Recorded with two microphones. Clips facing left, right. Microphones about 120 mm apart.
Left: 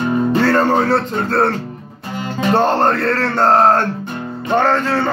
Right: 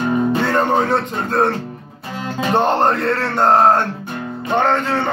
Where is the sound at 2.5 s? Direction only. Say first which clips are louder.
Left 1 dB; 20° right (ahead or behind).